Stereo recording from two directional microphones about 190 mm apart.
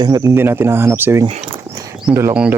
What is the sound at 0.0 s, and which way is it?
Speech, 20° right (ahead or behind).